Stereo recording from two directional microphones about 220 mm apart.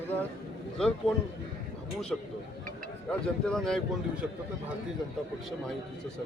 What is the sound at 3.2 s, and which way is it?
Speech, 5° left (ahead or behind).